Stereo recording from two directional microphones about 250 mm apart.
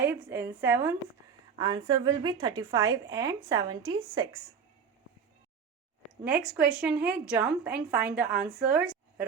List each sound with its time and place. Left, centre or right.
0.0 s a woman's voice: centre
6.5 s a woman's voice: centre